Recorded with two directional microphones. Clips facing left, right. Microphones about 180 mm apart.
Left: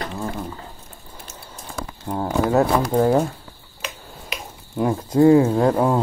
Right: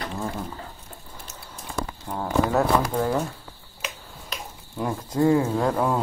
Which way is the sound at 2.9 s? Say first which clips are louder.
Left 7 dB; 45° left (ahead or behind).